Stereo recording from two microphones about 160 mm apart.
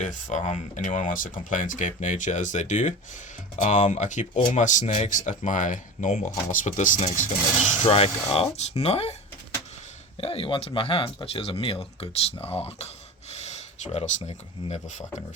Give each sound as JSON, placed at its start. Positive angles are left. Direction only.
{"t": 0.0, "sound": "speech", "side_deg": 50}
{"t": 7.9, "sound": "speech", "side_deg": 35}
{"t": 10.2, "sound": "speech", "side_deg": 35}